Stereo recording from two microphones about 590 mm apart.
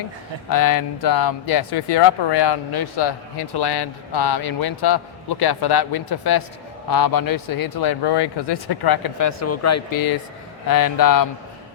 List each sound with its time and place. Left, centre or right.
0.5 s speech: left